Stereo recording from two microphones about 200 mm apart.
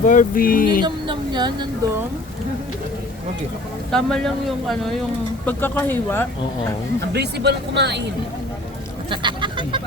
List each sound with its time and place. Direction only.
0.0 s speech: 40° left (ahead or behind)
0.9 s speech: 25° right (ahead or behind)
3.9 s a man's voice: 5° left (ahead or behind)
7.1 s speech: 55° right (ahead or behind)
9.0 s chicken: 25° right (ahead or behind)